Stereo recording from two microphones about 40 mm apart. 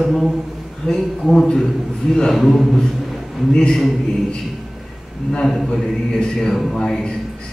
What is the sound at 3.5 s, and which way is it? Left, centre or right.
Speech, centre.